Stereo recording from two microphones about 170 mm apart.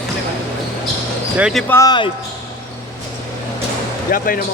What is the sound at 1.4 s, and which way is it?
Speech, 5° right (ahead or behind).